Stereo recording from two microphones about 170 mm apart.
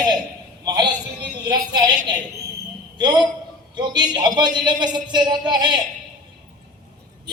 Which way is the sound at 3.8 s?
25° right (ahead or behind).